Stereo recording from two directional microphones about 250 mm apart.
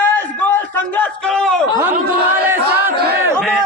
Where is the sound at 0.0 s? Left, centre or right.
Centre.